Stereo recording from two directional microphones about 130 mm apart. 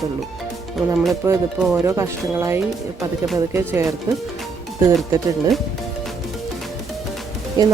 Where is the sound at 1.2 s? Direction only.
20° right (ahead or behind).